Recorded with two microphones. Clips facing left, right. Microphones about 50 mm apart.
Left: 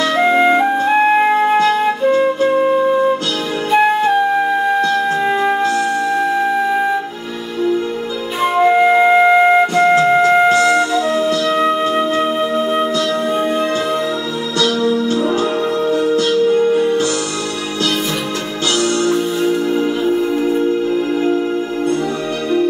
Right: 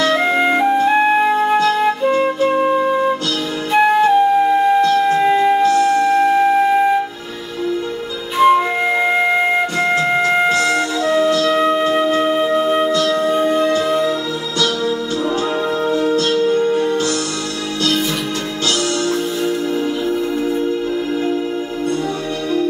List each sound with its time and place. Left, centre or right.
0.2 s music: centre
1.2 s flute: centre
2.0 s flute: centre
3.7 s flute: centre
4.8 s wind instrument: centre
5.3 s music: centre
8.4 s music: centre
10.5 s music: centre
11.4 s flute: centre
14.6 s music: centre
16.1 s music: centre
16.5 s music: centre
18.8 s music: left